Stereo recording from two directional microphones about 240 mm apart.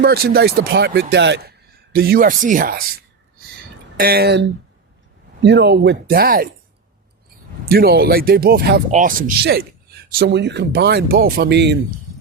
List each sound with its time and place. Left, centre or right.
0.0 s speech: right
3.9 s speech: right
7.6 s speech: right